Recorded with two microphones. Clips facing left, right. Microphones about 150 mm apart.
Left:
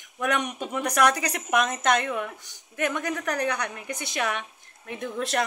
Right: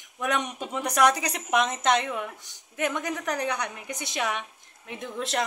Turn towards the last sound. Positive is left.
turn(degrees=-20)  # may be behind; listen again after turning